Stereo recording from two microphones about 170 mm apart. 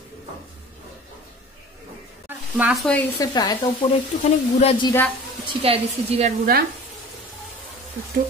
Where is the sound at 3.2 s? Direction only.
25° left (ahead or behind).